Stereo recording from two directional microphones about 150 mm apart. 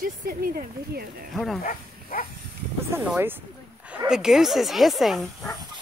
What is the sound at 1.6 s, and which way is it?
Dog, 70° left (ahead or behind).